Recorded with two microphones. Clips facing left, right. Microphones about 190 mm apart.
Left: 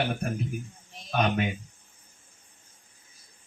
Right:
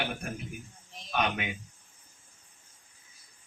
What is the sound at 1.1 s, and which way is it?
Speech, 40° left (ahead or behind).